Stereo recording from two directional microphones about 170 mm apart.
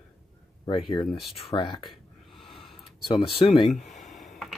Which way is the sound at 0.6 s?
30° left (ahead or behind).